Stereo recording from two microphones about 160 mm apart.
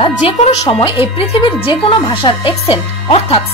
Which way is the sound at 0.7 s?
30° left (ahead or behind).